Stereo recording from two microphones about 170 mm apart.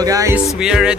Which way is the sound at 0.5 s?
5° right (ahead or behind).